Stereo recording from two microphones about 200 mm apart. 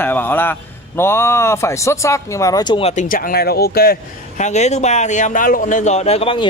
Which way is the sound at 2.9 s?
45° left (ahead or behind).